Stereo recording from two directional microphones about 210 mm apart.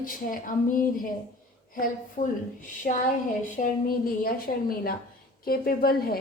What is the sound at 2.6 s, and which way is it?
A woman's voice, 40° left (ahead or behind).